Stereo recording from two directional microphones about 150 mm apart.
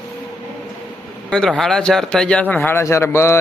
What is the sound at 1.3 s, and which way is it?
A man's voice, 5° left (ahead or behind).